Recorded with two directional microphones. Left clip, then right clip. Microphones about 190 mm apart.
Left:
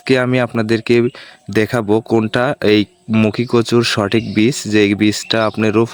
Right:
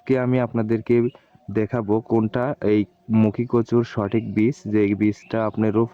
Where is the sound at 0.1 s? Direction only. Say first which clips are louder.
Left 7 dB; 25° left (ahead or behind).